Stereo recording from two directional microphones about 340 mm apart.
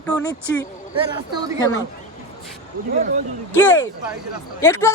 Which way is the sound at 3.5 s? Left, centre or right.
Centre.